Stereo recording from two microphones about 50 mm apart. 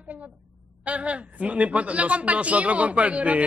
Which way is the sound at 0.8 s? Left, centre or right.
Right.